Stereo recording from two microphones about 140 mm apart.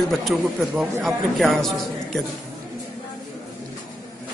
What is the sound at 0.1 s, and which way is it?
A man's voice, centre (ahead or behind).